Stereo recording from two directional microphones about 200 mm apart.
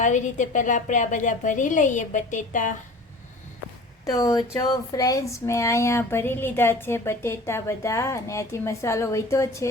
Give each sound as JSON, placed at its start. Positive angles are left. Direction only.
{"t": 0.0, "sound": "a woman's voice", "side_deg": 40}
{"t": 4.1, "sound": "speech", "side_deg": 15}